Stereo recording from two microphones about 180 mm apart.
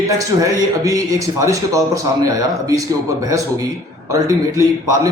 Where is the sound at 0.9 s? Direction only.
20° right (ahead or behind).